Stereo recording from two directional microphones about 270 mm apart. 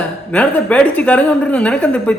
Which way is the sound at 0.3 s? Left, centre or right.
Centre.